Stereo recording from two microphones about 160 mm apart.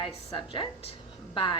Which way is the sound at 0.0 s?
30° left (ahead or behind).